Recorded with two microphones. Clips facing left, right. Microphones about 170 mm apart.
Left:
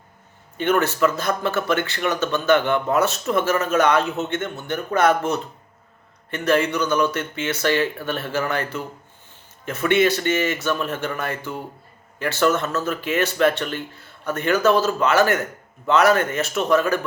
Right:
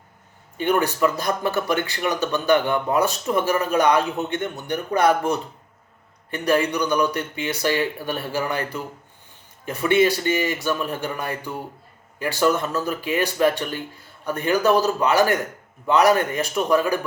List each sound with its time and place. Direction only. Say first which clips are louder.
0.6 s a man's voice: left 1 dB; 15° right (ahead or behind)
9.6 s a man's voice: even; 15° right (ahead or behind)